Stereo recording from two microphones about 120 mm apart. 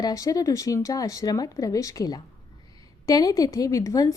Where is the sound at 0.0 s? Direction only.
30° left (ahead or behind).